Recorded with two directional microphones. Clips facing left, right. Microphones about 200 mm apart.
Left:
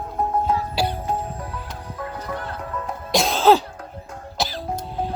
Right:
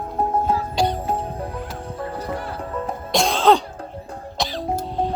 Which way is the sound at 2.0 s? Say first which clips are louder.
Right 2 dB; 30° right (ahead or behind).